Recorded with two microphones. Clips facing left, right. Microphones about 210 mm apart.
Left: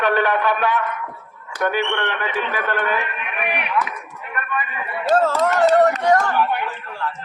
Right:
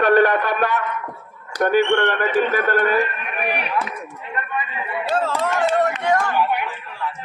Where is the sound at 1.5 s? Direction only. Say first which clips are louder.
Right 5 dB; 45° right (ahead or behind); by 4.8 s 25° right (ahead or behind).